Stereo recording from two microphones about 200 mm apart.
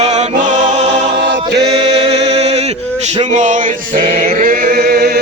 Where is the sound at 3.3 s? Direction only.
40° right (ahead or behind).